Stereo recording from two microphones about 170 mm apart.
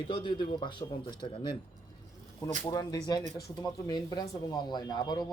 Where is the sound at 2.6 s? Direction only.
20° left (ahead or behind).